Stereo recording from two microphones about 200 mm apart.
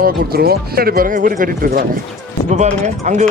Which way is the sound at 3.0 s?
35° right (ahead or behind).